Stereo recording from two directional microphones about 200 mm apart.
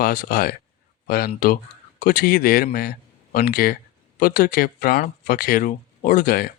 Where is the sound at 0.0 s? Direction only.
45° left (ahead or behind).